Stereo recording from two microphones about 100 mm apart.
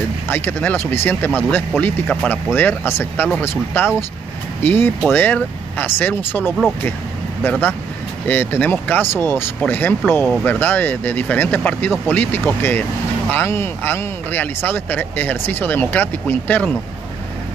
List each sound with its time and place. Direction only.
0.3 s speech: 20° left (ahead or behind)
8.3 s speech: 15° left (ahead or behind)